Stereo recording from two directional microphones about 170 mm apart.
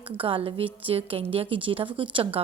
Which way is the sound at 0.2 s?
30° right (ahead or behind).